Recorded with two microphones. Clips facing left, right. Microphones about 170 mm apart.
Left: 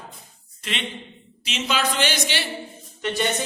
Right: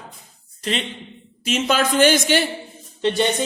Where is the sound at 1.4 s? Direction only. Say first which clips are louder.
Right 5 dB; 50° right (ahead or behind).